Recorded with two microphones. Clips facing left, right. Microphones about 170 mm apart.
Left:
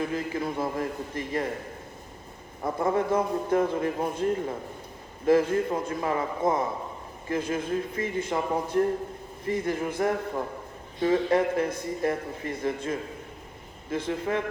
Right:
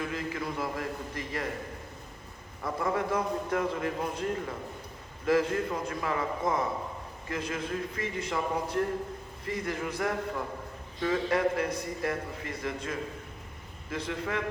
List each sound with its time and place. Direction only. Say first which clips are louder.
0.0 s a man's voice: left 5 dB; 25° left (ahead or behind)
2.6 s a man's voice: left 5 dB; 25° left (ahead or behind)
14.1 s a man's voice: left 5 dB; 30° left (ahead or behind)